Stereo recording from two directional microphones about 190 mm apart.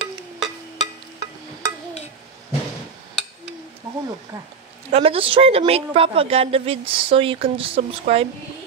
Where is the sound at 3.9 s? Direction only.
15° right (ahead or behind).